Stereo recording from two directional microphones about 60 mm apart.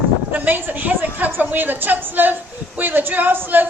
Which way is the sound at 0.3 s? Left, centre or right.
Right.